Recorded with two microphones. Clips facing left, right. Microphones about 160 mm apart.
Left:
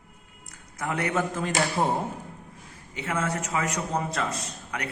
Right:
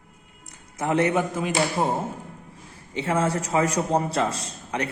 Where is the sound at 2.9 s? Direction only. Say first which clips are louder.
Right 5 dB; 30° right (ahead or behind).